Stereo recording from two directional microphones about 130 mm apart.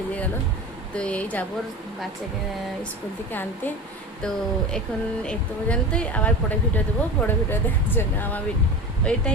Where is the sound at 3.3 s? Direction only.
15° left (ahead or behind).